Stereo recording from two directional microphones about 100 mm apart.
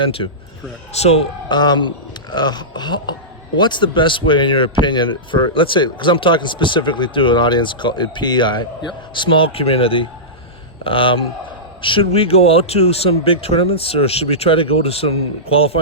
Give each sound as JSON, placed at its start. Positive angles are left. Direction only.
{"t": 0.0, "sound": "a man's voice", "side_deg": 60}
{"t": 0.9, "sound": "speech", "side_deg": 90}
{"t": 1.5, "sound": "a man's voice", "side_deg": 45}